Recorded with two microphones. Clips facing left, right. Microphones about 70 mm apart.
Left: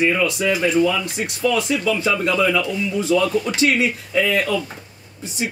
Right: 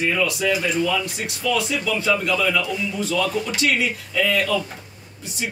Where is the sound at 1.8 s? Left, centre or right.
Left.